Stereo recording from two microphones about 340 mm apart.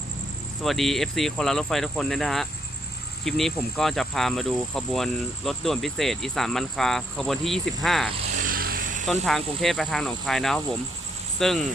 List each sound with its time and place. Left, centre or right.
0.6 s speech: centre
8.4 s a sound: right
9.2 s speech: centre